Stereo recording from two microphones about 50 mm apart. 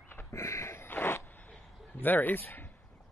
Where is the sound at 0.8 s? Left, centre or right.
Left.